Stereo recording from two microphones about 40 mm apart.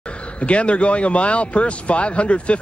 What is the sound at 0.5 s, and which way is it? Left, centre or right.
Speech, left.